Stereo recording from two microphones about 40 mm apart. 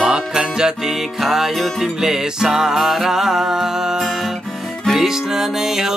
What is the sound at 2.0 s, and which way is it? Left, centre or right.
Music, centre.